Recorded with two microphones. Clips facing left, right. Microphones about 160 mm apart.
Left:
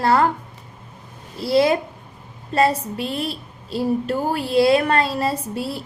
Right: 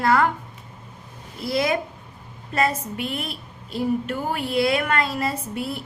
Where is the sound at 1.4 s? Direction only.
30° left (ahead or behind).